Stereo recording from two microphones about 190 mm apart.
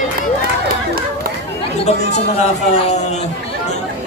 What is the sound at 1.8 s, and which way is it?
Speech, 35° left (ahead or behind).